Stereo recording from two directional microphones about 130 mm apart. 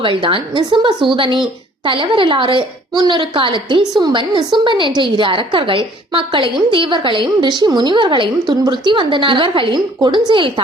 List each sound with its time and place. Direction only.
0.0 s a woman's voice: 40° right (ahead or behind)